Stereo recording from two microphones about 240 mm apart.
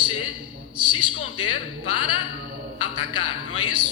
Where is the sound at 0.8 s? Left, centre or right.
Left.